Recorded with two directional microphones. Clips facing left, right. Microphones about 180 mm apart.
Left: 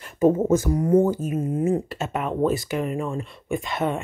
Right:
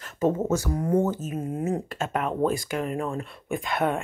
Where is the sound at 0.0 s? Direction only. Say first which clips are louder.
Left 5 dB; 15° left (ahead or behind).